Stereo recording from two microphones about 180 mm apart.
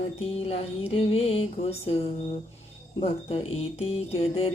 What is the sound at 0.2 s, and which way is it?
Speech, 35° left (ahead or behind).